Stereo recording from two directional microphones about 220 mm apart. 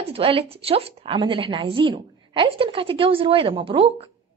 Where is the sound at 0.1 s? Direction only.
25° right (ahead or behind).